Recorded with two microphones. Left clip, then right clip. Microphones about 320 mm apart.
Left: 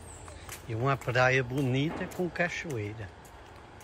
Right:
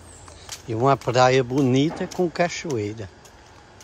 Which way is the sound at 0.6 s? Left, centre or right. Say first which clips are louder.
Right 11 dB; centre.